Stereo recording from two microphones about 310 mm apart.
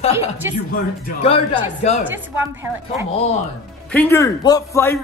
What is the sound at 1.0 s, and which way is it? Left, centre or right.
A man's voice, centre.